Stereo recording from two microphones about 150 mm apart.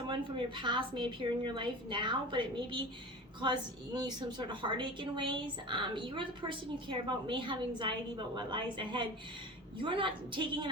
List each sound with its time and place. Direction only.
0.1 s a woman's voice: 35° right (ahead or behind)